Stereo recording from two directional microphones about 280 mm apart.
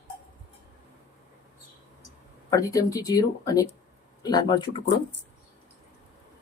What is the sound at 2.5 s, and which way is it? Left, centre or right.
Speech, centre.